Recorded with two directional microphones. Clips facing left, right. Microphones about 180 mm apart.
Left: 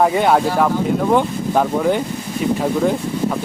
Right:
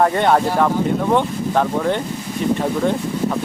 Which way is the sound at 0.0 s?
5° left (ahead or behind).